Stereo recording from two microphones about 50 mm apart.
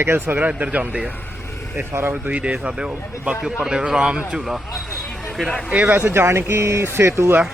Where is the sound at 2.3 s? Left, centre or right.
Right.